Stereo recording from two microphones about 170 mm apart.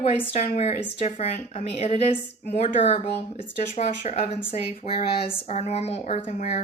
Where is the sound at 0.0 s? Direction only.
35° left (ahead or behind).